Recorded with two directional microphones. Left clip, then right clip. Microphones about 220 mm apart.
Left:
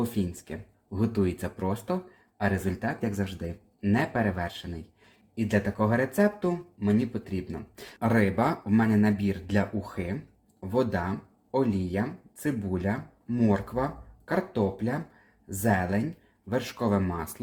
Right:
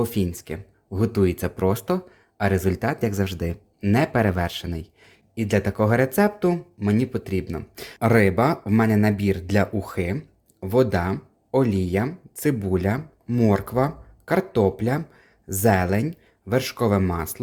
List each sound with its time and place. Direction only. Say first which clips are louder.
0.0 s speech: right 7 dB; 45° right (ahead or behind)